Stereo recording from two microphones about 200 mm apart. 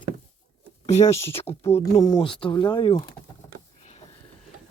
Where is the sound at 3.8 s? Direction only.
35° left (ahead or behind).